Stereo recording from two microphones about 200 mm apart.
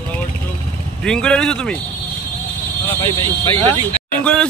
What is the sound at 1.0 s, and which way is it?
Speech, 5° left (ahead or behind).